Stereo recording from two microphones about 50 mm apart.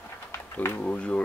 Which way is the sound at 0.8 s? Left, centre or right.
Left.